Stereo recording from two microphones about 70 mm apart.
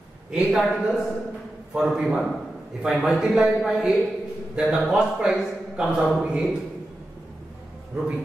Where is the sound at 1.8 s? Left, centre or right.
Centre.